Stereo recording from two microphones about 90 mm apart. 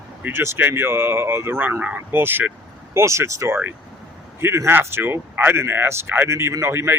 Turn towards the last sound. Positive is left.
turn(degrees=-30)  # may be behind; listen again after turning